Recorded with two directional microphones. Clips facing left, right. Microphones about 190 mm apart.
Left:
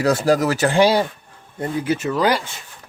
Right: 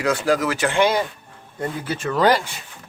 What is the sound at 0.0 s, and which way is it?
Speech, 40° left (ahead or behind).